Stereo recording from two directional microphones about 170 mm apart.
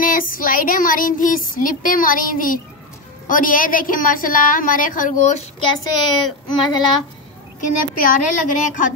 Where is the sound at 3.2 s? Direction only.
55° left (ahead or behind).